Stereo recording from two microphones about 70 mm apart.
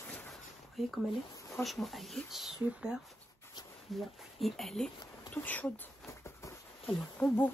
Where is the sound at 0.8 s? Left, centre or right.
Centre.